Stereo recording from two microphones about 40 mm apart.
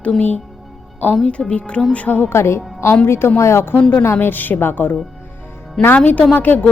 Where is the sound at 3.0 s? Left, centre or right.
Left.